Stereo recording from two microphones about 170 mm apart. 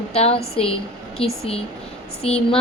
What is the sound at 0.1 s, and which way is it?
A woman's voice, 35° left (ahead or behind).